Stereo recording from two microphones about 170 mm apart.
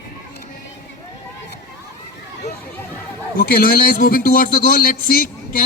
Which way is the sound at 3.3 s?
60° left (ahead or behind).